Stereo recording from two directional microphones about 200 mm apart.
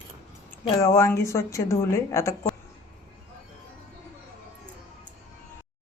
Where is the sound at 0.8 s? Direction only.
15° left (ahead or behind).